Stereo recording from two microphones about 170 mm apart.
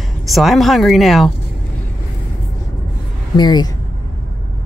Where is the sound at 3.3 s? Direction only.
25° left (ahead or behind).